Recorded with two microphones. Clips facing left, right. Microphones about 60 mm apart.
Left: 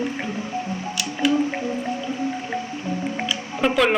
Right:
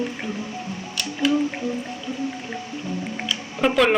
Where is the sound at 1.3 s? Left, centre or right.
Left.